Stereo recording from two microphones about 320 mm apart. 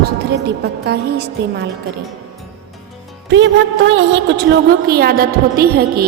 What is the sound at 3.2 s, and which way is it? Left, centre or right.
A woman's voice, right.